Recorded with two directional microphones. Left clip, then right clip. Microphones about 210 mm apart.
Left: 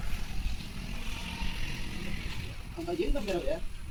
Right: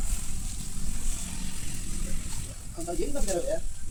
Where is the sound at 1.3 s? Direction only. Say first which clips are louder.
Left 2 dB; 55° right (ahead or behind).